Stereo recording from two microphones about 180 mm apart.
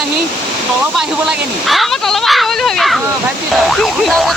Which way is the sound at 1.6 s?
Centre (ahead or behind).